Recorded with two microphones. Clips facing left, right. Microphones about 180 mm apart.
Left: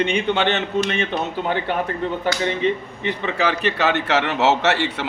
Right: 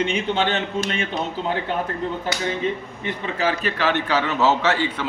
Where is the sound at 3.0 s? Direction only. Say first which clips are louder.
Left 2 dB; 75° left (ahead or behind).